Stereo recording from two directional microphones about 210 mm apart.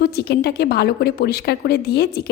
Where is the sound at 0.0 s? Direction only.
50° left (ahead or behind).